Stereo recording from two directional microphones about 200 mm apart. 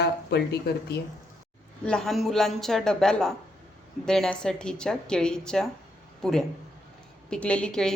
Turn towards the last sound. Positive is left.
turn(degrees=5)  # may be behind; listen again after turning